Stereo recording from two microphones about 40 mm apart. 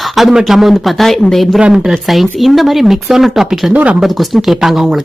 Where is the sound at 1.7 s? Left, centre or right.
Centre.